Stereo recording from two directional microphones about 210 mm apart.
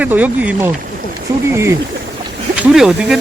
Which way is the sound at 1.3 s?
15° right (ahead or behind).